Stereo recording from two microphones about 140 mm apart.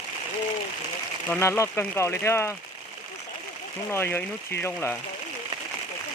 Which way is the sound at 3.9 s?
15° left (ahead or behind).